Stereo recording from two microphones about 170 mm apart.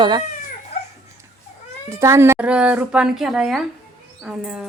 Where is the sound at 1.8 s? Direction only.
15° right (ahead or behind).